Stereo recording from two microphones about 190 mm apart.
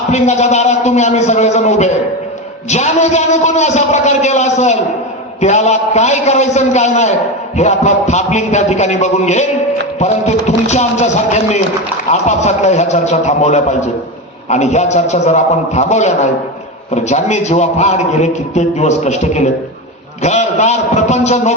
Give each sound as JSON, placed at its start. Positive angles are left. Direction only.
{"t": 0.1, "sound": "a man's voice", "side_deg": 35}